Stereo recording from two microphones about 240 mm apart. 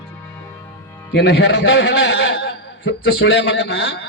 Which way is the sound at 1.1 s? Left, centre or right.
Left.